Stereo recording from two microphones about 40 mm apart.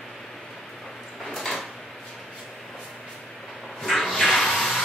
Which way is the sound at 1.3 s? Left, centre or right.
Centre.